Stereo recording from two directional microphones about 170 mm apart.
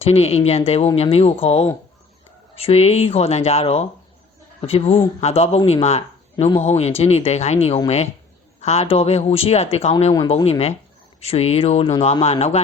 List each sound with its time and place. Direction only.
0.0 s speech: 40° left (ahead or behind)